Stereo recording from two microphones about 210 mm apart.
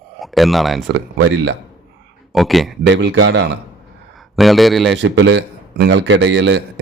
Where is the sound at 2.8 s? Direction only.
55° right (ahead or behind).